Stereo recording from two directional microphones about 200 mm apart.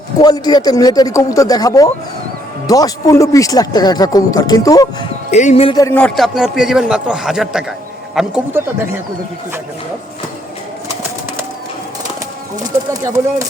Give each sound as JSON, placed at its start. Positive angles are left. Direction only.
{"t": 0.2, "sound": "a man's voice", "side_deg": 20}
{"t": 5.3, "sound": "a man's voice", "side_deg": 35}
{"t": 5.7, "sound": "a man's voice", "side_deg": 10}